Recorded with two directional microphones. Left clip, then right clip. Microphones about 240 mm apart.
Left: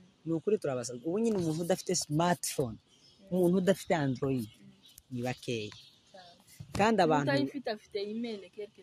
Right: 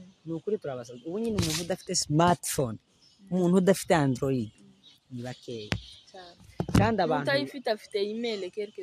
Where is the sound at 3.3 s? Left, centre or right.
Right.